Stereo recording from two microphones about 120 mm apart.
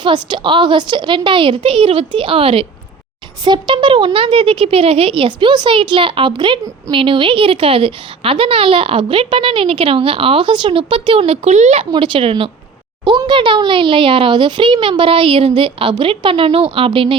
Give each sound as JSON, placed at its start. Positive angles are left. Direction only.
{"t": 0.0, "sound": "a woman's voice", "side_deg": -40}
{"t": 11.9, "sound": "a woman's voice", "side_deg": -45}